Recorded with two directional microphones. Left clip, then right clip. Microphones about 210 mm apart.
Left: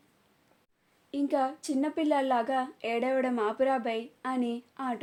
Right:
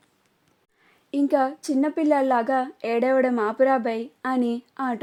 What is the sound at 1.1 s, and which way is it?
A woman's voice, 40° right (ahead or behind).